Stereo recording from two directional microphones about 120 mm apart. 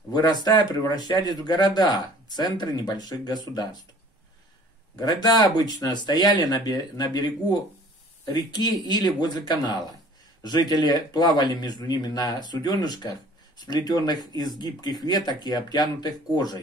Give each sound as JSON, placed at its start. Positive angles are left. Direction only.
{"t": 0.1, "sound": "speech", "side_deg": 35}
{"t": 4.9, "sound": "speech", "side_deg": 35}